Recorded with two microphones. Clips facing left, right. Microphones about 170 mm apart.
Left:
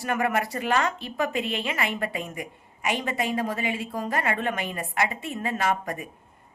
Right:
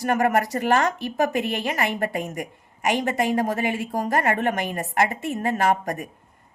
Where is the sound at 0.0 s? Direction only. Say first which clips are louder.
Right 5 dB; 45° right (ahead or behind).